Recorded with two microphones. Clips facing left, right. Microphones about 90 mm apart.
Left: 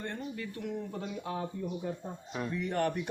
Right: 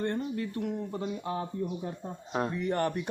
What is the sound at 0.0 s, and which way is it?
Speech, 40° right (ahead or behind).